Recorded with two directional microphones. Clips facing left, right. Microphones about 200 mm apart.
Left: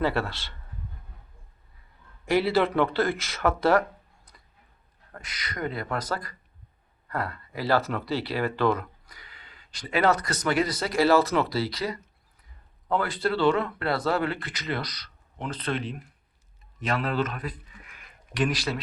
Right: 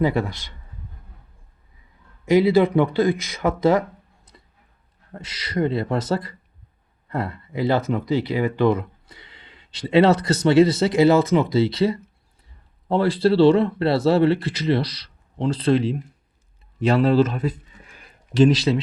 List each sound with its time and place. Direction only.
0.0 s speech: 20° right (ahead or behind)
2.2 s speech: 20° right (ahead or behind)
5.1 s speech: 25° right (ahead or behind)